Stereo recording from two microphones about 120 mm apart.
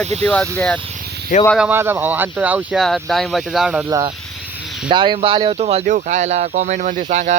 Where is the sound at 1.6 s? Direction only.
15° right (ahead or behind).